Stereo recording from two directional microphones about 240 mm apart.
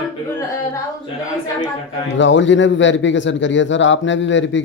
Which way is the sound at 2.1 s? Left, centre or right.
Left.